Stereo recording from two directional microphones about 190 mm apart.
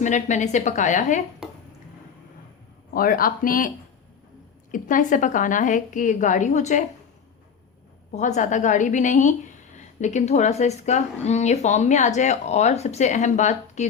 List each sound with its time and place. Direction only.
0.0 s a woman's voice: 40° left (ahead or behind)
1.4 s a sound: 5° right (ahead or behind)
2.9 s a woman's voice: 50° left (ahead or behind)
4.7 s a woman's voice: 45° left (ahead or behind)
8.1 s a woman's voice: 40° left (ahead or behind)